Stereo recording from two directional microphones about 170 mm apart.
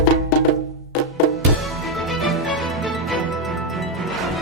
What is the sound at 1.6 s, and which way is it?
Music, centre (ahead or behind).